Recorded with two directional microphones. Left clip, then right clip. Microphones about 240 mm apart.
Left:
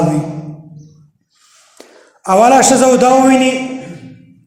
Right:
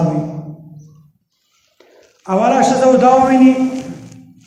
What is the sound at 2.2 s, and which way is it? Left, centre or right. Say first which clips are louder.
Speech: left 5 dB; left.